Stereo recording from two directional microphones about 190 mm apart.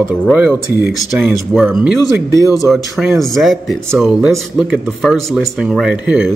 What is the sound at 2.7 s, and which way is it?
Speech, centre (ahead or behind).